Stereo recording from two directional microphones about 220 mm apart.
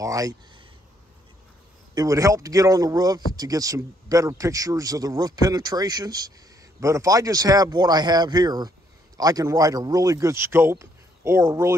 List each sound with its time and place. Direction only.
0.0 s speech: 15° right (ahead or behind)
2.0 s speech: 15° right (ahead or behind)